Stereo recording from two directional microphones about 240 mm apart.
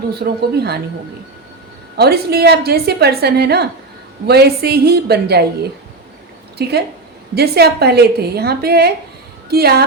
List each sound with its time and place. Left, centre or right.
0.1 s a woman's voice: right
2.0 s a woman's voice: right
6.6 s a woman's voice: right